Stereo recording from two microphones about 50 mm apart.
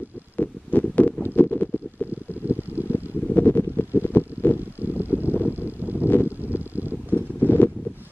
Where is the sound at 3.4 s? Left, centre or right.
Left.